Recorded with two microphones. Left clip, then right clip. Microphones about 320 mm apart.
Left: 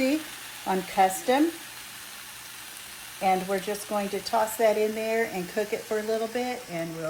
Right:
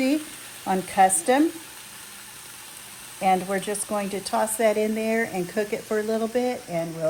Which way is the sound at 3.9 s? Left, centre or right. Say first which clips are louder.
Even; right.